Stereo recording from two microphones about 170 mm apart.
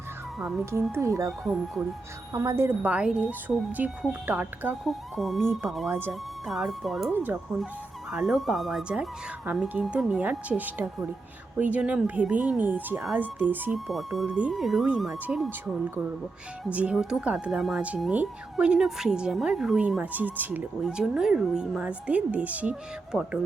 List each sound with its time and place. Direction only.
0.3 s speech: 5° right (ahead or behind)
0.6 s speech: 15° right (ahead or behind)
2.3 s speech: 20° right (ahead or behind); by 7.1 s centre (ahead or behind)
7.1 s speech: 10° right (ahead or behind)
13.7 s speech: centre (ahead or behind)